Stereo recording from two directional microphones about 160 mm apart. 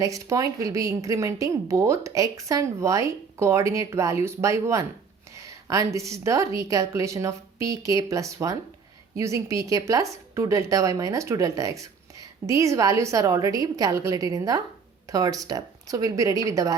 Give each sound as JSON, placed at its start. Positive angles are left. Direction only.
{"t": 0.0, "sound": "a woman's voice", "side_deg": -20}